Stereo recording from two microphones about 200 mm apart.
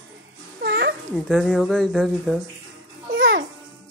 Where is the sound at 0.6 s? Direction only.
55° right (ahead or behind).